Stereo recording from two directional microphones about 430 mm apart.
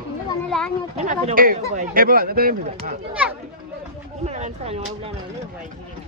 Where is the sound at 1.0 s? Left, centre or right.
Centre.